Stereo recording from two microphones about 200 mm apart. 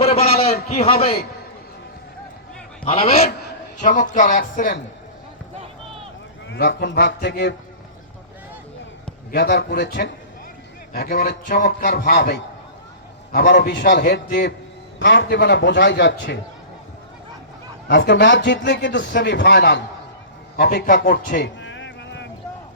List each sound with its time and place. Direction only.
0.0 s a sound: 30° left (ahead or behind)
2.8 s a man's voice: 30° left (ahead or behind); by 4.8 s 45° left (ahead or behind)
6.5 s a man's voice: 55° left (ahead or behind)
9.3 s a man's voice: 55° left (ahead or behind)
14.9 s a man's voice: 65° left (ahead or behind)
17.8 s a man's voice: 60° left (ahead or behind)
21.6 s a sound: 65° left (ahead or behind)